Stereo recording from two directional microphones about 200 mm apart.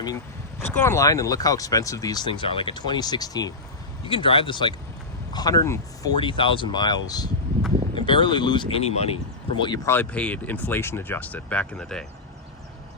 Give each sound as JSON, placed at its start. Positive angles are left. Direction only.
{"t": 0.6, "sound": "speech", "side_deg": 10}